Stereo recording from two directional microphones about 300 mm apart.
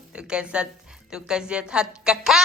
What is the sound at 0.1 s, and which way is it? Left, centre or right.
Speech, centre.